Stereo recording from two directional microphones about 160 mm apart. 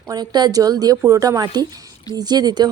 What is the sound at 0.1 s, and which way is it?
A woman's voice, 25° right (ahead or behind).